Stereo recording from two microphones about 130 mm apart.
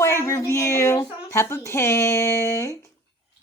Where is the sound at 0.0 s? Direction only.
20° left (ahead or behind).